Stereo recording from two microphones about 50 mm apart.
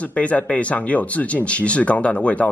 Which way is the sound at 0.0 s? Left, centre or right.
Left.